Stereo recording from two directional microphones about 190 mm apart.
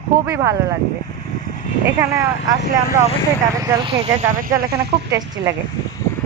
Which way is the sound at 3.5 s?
20° right (ahead or behind).